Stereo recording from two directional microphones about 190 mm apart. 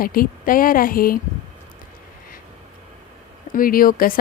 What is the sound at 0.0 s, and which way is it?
A woman's voice, 50° left (ahead or behind).